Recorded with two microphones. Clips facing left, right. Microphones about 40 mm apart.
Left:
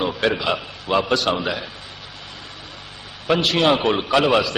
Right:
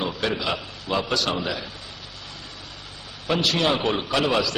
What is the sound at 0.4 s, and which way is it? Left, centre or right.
A man's voice, left.